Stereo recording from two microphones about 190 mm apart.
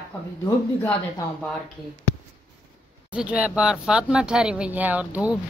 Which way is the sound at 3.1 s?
5° right (ahead or behind).